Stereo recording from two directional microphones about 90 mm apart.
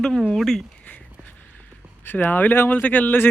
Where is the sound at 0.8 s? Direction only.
15° left (ahead or behind).